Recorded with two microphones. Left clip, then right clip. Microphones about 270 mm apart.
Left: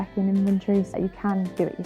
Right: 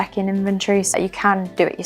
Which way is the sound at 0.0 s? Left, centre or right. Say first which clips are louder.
Right 5 dB; centre.